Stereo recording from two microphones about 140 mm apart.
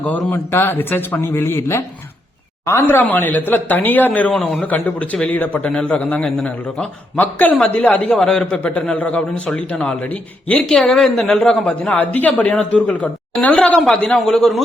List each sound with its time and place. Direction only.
0.0 s a woman's voice: 10° left (ahead or behind)